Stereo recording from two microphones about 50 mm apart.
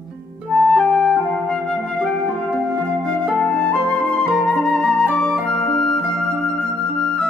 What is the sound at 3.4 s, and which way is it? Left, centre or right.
Flute, centre.